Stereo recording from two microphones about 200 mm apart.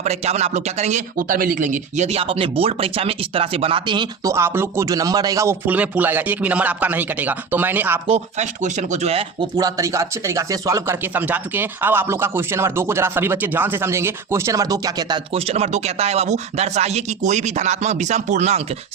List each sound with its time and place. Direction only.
0.0 s speech: 35° right (ahead or behind); by 8.0 s 10° right (ahead or behind)
8.0 s speech: 30° right (ahead or behind)
9.6 s speech: 15° right (ahead or behind); by 18.6 s 35° right (ahead or behind)